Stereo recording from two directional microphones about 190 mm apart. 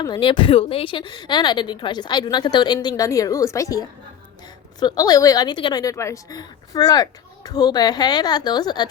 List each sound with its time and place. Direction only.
0.0 s a woman's voice: 25° left (ahead or behind)